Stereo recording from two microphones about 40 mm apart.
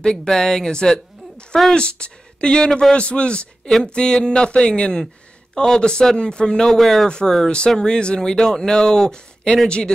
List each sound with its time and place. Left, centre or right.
0.0 s speech: centre
3.0 s speech: left; by 7.1 s centre
7.1 s speech: left
9.1 s speech: left